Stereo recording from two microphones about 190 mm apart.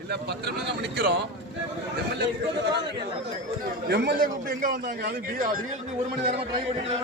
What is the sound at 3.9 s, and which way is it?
A man's voice, 60° right (ahead or behind).